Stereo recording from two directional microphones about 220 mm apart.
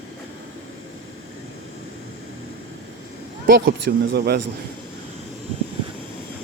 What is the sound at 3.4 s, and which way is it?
Speech, 45° right (ahead or behind).